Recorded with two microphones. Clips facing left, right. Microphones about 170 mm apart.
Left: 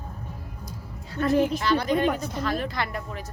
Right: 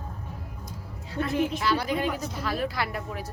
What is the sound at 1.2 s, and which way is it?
Speech, 40° left (ahead or behind).